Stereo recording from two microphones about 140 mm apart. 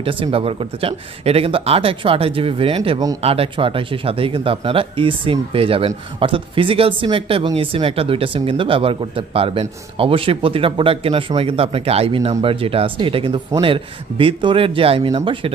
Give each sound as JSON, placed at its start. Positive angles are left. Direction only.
{"t": 0.0, "sound": "speech", "side_deg": -40}